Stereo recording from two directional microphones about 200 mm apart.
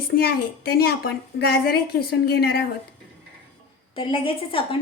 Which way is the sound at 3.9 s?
25° left (ahead or behind).